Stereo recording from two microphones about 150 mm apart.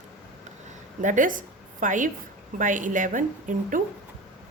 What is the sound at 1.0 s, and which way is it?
A woman's voice, 60° right (ahead or behind).